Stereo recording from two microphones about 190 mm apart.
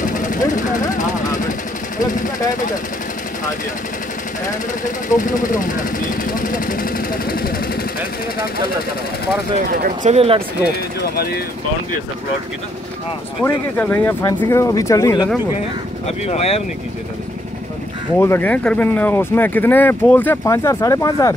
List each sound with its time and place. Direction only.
0.0 s vehicle: 45° left (ahead or behind)
2.0 s speech: 45° left (ahead or behind)
4.8 s speech: 45° left (ahead or behind)
10.0 s speech: 30° right (ahead or behind)
11.0 s speech: 55° left (ahead or behind)
13.4 s speech: 10° left (ahead or behind)
16.1 s speech: 35° left (ahead or behind)
18.1 s speech: 10° left (ahead or behind)